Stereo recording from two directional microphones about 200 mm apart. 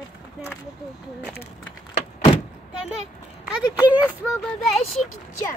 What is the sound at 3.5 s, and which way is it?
Speech, 5° right (ahead or behind).